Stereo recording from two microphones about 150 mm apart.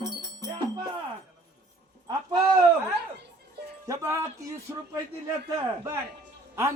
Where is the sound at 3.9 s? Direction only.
20° right (ahead or behind).